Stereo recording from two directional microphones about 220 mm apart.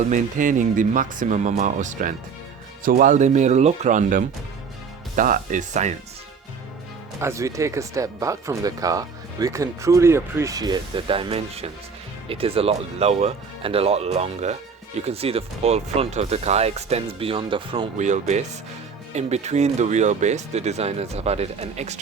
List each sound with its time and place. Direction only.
0.1 s speech: 35° right (ahead or behind)
7.2 s speech: 10° right (ahead or behind); by 22.0 s 30° right (ahead or behind)